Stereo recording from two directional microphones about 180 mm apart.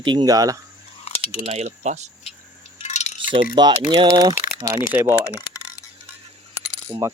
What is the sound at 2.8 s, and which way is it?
Wind chime, 40° left (ahead or behind).